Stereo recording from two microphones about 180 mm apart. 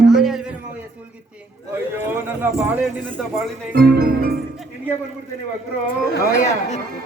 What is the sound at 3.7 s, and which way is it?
Speech, 55° right (ahead or behind).